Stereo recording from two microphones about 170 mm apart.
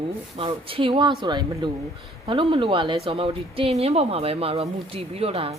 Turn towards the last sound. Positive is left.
turn(degrees=-35)  # may be behind; listen again after turning